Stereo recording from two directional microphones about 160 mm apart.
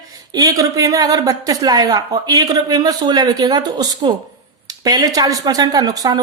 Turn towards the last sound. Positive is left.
turn(degrees=-25)  # may be behind; listen again after turning